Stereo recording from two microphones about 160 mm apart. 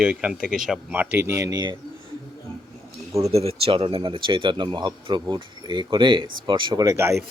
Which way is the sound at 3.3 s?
40° right (ahead or behind).